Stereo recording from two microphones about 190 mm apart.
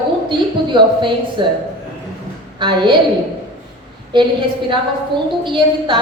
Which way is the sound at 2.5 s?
25° right (ahead or behind).